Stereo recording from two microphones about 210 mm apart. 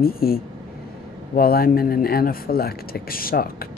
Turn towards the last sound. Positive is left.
turn(degrees=45)  # may be behind; listen again after turning